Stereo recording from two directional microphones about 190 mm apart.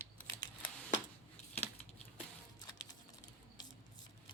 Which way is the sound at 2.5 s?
20° left (ahead or behind).